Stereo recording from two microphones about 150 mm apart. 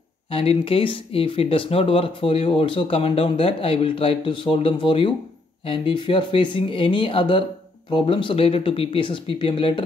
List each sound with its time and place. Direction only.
0.3 s speech: 40° left (ahead or behind)